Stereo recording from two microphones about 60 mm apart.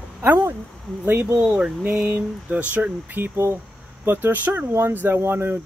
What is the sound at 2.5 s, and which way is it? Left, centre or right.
Speech, right.